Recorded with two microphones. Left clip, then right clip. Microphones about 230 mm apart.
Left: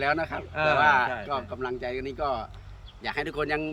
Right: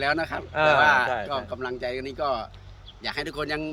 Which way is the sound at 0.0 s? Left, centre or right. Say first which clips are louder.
Right 1 dB; centre.